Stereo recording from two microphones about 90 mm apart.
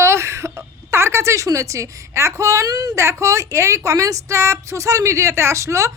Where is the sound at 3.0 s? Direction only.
35° right (ahead or behind).